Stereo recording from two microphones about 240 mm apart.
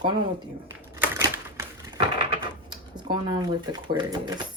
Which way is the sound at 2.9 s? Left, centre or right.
Centre.